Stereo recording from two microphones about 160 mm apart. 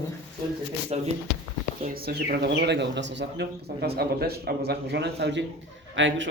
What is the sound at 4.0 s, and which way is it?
A man's voice, 80° right.